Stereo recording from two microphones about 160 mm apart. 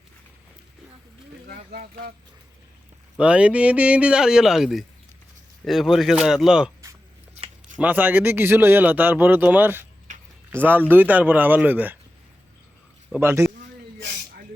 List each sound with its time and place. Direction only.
1.5 s speech: 65° right (ahead or behind)
3.2 s speech: 5° right (ahead or behind)
7.8 s speech: 10° right (ahead or behind)
13.1 s speech: 15° right (ahead or behind)